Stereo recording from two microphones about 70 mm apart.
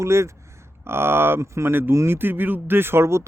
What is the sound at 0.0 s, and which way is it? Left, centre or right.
Speech, right.